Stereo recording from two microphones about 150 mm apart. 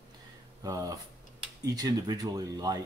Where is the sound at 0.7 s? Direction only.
25° right (ahead or behind).